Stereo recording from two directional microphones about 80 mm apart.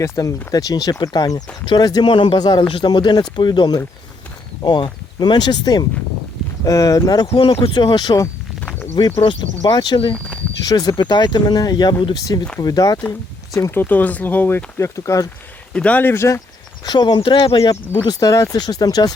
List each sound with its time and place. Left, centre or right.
0.0 s speech: left
6.7 s speech: left
7.4 s speech: left
9.0 s speech: left
10.6 s speech: left
10.9 s speech: left
13.1 s speech: left
13.7 s speech: left
15.7 s speech: centre; by 16.4 s left
16.8 s speech: left
17.6 s speech: left